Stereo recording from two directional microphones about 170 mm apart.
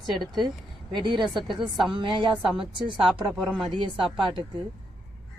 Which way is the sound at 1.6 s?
Centre (ahead or behind).